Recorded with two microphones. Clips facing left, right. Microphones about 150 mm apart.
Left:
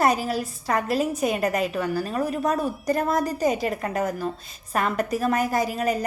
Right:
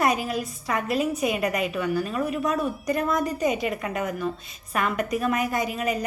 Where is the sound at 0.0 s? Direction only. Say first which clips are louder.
Left 2 dB; 35° left (ahead or behind).